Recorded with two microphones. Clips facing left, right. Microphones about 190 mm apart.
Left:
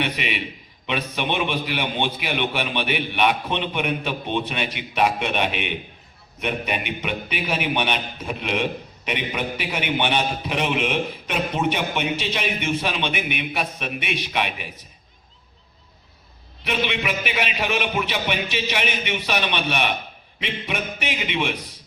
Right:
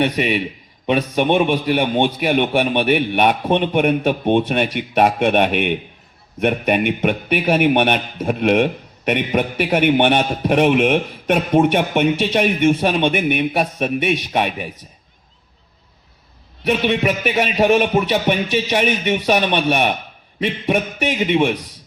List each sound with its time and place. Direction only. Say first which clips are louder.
0.0 s a man's voice: right 8 dB; 45° right (ahead or behind)
16.6 s a man's voice: right 8 dB; 45° right (ahead or behind)